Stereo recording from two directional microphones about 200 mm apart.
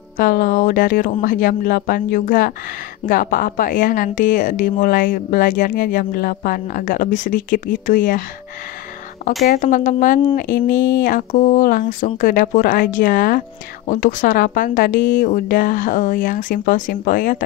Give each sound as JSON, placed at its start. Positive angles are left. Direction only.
{"t": 0.2, "sound": "a woman's voice", "side_deg": 45}
{"t": 9.5, "sound": "a woman's voice", "side_deg": 40}